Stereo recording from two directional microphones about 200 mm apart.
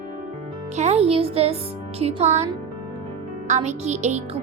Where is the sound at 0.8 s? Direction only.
30° right (ahead or behind).